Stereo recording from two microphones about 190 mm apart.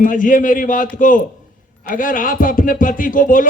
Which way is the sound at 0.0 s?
45° left (ahead or behind).